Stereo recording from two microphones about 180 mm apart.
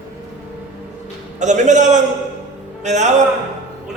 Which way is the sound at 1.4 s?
40° right (ahead or behind).